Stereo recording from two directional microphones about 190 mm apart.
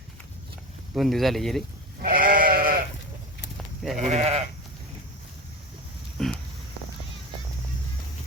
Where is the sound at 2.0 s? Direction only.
50° right (ahead or behind).